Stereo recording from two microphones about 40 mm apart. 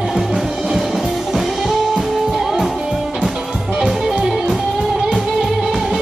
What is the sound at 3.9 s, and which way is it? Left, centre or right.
Music, centre.